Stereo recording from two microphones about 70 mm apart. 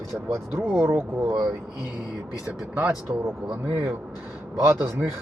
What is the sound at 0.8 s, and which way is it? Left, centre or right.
Speech, right.